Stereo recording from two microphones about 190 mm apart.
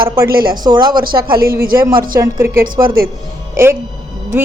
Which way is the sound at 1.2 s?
50° right (ahead or behind).